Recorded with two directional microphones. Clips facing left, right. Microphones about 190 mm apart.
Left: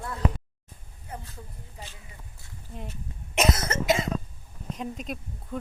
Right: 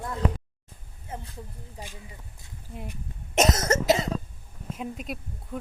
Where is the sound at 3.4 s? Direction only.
40° right (ahead or behind).